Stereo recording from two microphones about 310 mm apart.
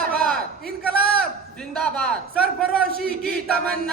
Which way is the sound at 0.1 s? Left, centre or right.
Centre.